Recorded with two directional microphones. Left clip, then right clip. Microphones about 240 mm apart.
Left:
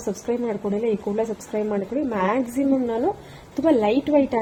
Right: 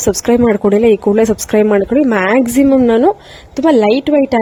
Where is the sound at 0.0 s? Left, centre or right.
Right.